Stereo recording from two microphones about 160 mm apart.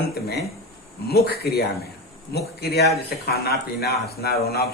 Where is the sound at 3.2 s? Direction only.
80° left.